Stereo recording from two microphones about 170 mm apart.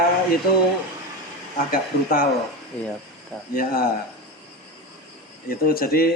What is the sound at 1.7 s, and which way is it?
Speech, 55° left (ahead or behind).